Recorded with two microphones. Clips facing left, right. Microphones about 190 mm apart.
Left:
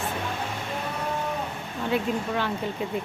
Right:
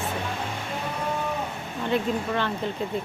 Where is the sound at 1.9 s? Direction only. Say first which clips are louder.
Right 1 dB; 10° left (ahead or behind).